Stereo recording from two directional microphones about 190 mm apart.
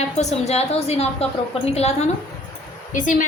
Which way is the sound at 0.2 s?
35° left (ahead or behind).